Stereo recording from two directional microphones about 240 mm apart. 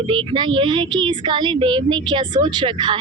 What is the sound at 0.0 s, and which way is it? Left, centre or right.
Speech, right.